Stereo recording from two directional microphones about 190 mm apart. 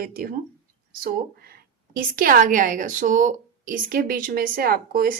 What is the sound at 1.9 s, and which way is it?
A woman's voice, 45° right (ahead or behind).